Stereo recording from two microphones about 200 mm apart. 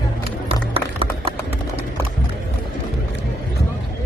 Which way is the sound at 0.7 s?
30° right (ahead or behind).